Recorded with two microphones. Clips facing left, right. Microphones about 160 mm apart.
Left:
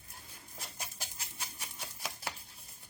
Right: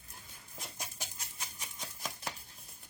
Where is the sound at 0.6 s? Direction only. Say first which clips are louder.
Right 1 dB; centre (ahead or behind).